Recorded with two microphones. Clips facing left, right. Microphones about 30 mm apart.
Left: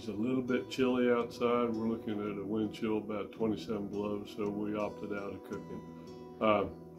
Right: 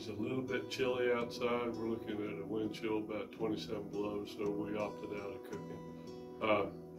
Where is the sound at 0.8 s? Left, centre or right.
Left.